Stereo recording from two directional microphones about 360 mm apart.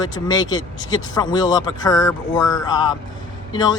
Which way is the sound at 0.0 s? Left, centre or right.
Centre.